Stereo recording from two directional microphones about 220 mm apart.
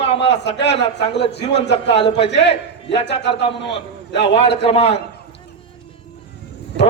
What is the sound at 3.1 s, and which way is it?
Speech, 50° left (ahead or behind).